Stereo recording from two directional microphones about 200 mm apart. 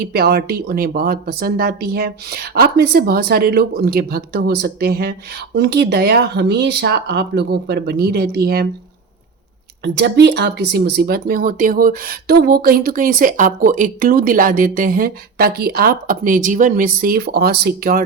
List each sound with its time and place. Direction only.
0.0 s speech: 50° right (ahead or behind)
9.8 s speech: 60° right (ahead or behind)